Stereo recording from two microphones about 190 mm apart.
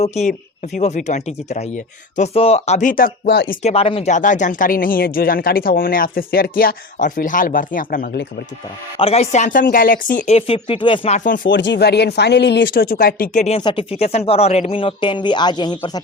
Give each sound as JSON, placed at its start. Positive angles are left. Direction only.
{"t": 0.0, "sound": "speech", "side_deg": 35}
{"t": 3.7, "sound": "speech", "side_deg": 30}
{"t": 9.0, "sound": "speech", "side_deg": 30}
{"t": 11.4, "sound": "speech", "side_deg": 70}
{"t": 13.6, "sound": "a woman's voice", "side_deg": 25}